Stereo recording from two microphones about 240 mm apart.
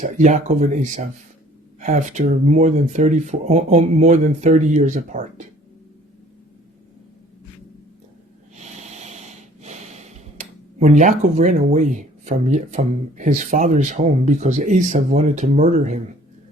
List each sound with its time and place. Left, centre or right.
0.0 s speech: right
8.5 s snort: right